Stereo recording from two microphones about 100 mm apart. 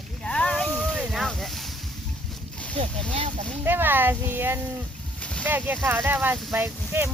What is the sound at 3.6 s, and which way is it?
Speech, 20° right (ahead or behind).